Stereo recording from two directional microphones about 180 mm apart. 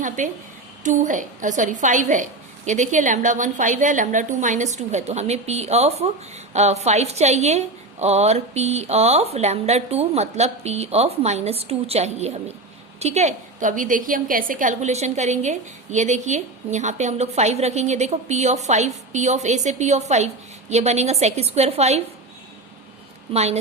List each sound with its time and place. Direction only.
0.2 s a woman's voice: 45° right (ahead or behind)
23.3 s a woman's voice: 35° right (ahead or behind)